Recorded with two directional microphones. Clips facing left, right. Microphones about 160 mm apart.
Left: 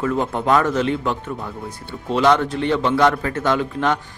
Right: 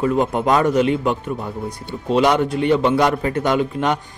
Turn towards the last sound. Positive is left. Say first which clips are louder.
# right 1 dB
turn(degrees=-15)  # may be behind; listen again after turning